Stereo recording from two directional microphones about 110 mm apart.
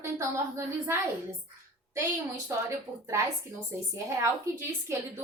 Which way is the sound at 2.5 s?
25° right (ahead or behind).